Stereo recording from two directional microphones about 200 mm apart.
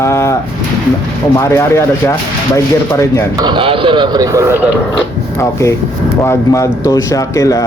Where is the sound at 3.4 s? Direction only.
25° right (ahead or behind).